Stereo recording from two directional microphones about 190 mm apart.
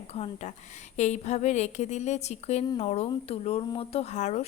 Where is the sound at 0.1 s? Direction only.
35° left (ahead or behind).